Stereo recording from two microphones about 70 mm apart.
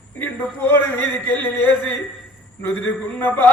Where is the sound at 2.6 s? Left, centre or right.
Left.